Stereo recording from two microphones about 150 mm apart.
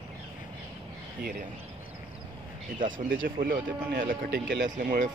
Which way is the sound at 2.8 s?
65° right (ahead or behind).